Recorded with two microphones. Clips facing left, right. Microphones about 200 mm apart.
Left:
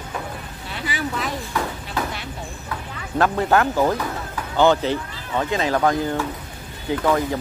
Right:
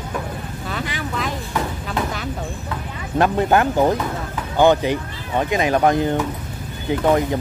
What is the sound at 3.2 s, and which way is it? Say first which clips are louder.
Speech: right 2 dB; 20° right (ahead or behind).